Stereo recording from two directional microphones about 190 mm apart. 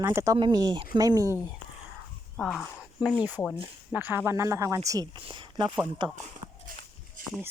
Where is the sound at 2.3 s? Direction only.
5° left (ahead or behind).